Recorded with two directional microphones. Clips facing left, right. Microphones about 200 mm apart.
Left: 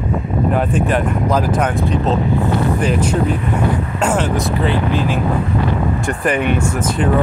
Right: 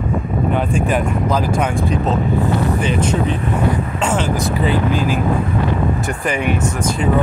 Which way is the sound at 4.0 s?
5° left (ahead or behind).